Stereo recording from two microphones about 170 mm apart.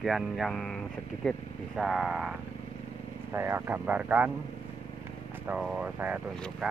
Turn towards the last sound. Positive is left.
turn(degrees=0)  # may be behind; listen again after turning